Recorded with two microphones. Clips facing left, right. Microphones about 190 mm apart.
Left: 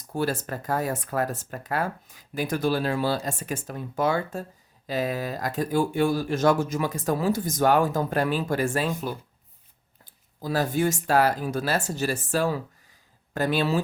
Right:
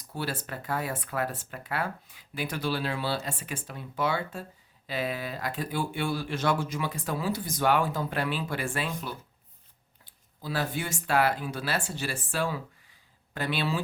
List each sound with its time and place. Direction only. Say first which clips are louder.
0.1 s speech: left 7 dB; 45° left (ahead or behind)